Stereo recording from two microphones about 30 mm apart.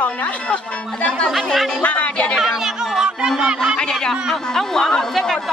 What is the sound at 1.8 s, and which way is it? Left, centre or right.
Speech, left.